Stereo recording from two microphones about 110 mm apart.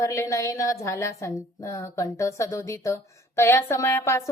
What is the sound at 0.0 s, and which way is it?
A woman's voice, 25° left (ahead or behind).